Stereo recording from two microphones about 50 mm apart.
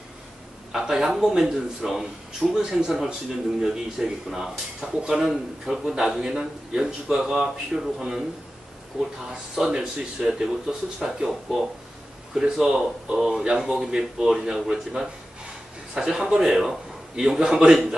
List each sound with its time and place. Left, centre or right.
0.7 s speech: centre
9.0 s a man's voice: centre